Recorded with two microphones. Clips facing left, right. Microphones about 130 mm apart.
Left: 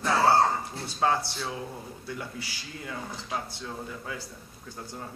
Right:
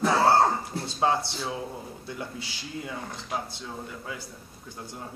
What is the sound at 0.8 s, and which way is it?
Speech, 15° right (ahead or behind).